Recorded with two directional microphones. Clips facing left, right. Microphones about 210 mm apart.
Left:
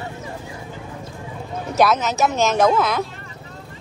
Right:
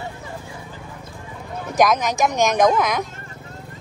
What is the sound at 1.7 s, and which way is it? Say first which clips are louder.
Speech: even; 15° right (ahead or behind).